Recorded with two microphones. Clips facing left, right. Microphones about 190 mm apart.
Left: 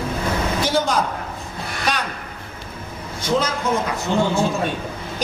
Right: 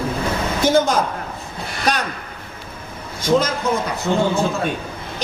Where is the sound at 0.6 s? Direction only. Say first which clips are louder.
Right 7 dB; 45° right (ahead or behind).